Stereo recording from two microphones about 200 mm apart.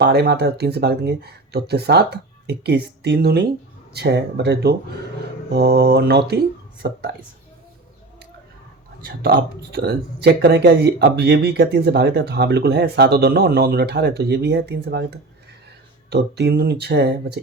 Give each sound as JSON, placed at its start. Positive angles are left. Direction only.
{"t": 0.0, "sound": "speech", "side_deg": -55}
{"t": 9.0, "sound": "speech", "side_deg": -50}
{"t": 16.0, "sound": "speech", "side_deg": -55}